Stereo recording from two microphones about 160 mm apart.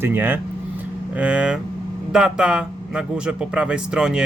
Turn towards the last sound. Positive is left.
turn(degrees=-5)  # may be behind; listen again after turning